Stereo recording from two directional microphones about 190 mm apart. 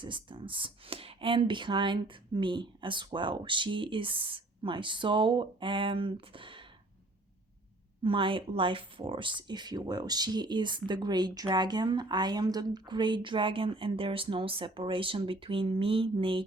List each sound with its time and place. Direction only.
0.0 s speech: 25° right (ahead or behind)
8.0 s speech: 25° right (ahead or behind)